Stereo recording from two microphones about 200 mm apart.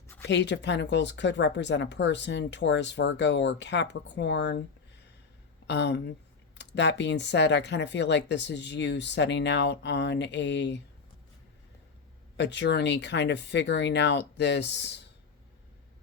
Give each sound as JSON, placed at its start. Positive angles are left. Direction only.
{"t": 0.3, "sound": "speech", "side_deg": 60}
{"t": 5.6, "sound": "speech", "side_deg": 60}
{"t": 12.4, "sound": "speech", "side_deg": 60}